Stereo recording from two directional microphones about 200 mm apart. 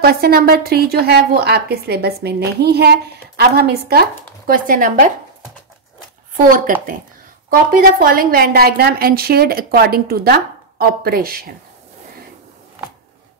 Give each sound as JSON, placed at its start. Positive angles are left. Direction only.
{"t": 0.0, "sound": "a woman's voice", "side_deg": -50}
{"t": 6.3, "sound": "a woman's voice", "side_deg": -45}